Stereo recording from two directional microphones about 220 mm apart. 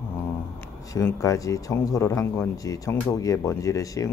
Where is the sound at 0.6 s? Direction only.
10° left (ahead or behind).